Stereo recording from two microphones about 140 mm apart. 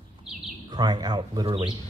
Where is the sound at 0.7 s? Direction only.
30° right (ahead or behind).